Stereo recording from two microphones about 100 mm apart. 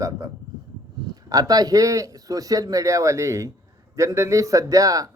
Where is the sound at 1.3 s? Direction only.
40° right (ahead or behind).